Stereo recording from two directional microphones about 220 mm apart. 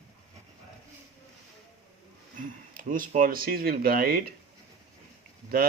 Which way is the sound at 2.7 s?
40° right (ahead or behind).